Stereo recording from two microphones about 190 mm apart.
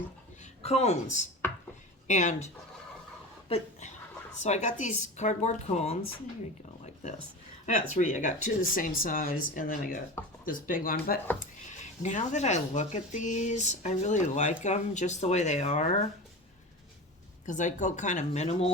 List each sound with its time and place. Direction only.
0.6 s speech: 35° left (ahead or behind)
3.5 s speech: 40° left (ahead or behind)
7.7 s speech: 40° left (ahead or behind)
11.3 s speech: 40° left (ahead or behind)
17.4 s speech: 40° left (ahead or behind)